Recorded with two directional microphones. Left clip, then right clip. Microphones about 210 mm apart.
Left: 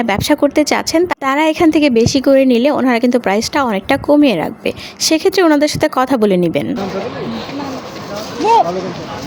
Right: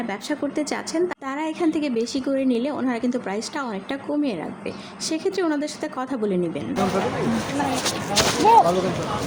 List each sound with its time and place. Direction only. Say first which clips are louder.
0.1 s a woman's voice: left 16 dB; 45° left (ahead or behind)